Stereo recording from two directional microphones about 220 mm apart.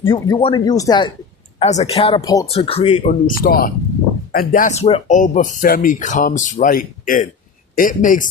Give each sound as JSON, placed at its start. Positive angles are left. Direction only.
{"t": 0.0, "sound": "speech", "side_deg": 25}
{"t": 1.5, "sound": "speech", "side_deg": 30}
{"t": 2.2, "sound": "speech", "side_deg": 15}
{"t": 2.5, "sound": "speech", "side_deg": 25}
{"t": 3.4, "sound": "speech", "side_deg": 40}